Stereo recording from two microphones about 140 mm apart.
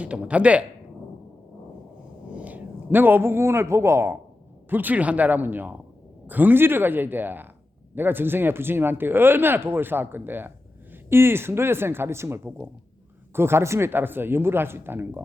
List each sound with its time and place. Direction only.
0.0 s speech: 10° right (ahead or behind)
2.3 s a man's voice: 10° right (ahead or behind)